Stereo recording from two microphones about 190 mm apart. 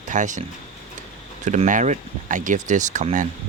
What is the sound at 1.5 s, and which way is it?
Speech, 40° right (ahead or behind).